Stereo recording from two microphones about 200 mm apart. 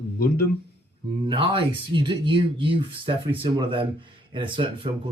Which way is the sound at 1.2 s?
25° right (ahead or behind).